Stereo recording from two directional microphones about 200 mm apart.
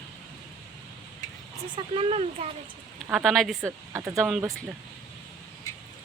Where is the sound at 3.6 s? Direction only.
15° right (ahead or behind).